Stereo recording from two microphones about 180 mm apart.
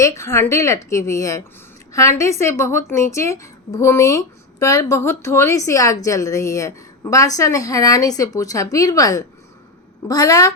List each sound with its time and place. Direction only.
0.0 s a woman's voice: 15° left (ahead or behind)